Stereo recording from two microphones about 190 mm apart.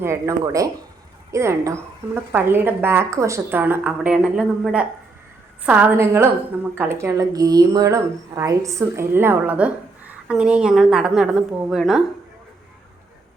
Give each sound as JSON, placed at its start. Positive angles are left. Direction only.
{"t": 0.0, "sound": "a woman's voice", "side_deg": -15}